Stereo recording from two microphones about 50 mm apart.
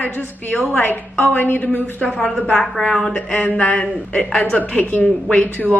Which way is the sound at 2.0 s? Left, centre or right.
Left.